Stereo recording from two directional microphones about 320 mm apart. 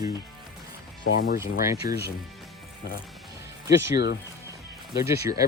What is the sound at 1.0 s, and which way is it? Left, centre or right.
Speech, left.